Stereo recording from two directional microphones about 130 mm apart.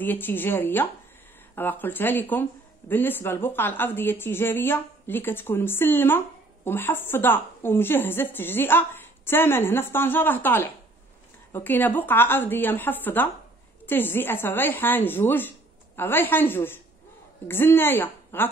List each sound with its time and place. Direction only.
0.0 s a woman's voice: 15° left (ahead or behind)